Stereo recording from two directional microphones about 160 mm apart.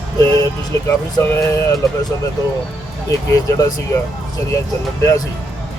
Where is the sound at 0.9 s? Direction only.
15° left (ahead or behind).